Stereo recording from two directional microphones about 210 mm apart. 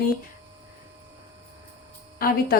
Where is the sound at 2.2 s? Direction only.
45° left (ahead or behind).